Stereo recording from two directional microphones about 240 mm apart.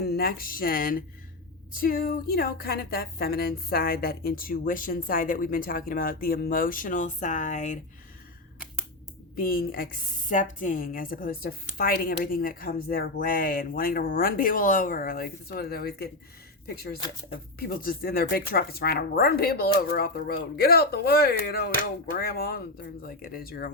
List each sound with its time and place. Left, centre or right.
0.0 s a woman's voice: left
9.3 s a woman's voice: left
17.6 s a woman's voice: left